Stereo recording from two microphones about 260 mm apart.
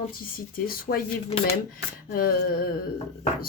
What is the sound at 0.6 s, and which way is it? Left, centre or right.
Speech, left.